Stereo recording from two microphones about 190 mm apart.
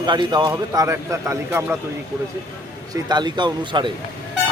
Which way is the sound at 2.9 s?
20° right (ahead or behind).